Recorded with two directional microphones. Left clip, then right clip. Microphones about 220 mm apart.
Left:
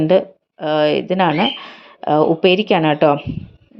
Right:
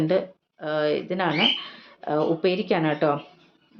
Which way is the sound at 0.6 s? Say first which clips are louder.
Left 9 dB; 35° left (ahead or behind).